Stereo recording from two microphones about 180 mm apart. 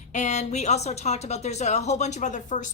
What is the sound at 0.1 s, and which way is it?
A woman's voice, 40° left (ahead or behind).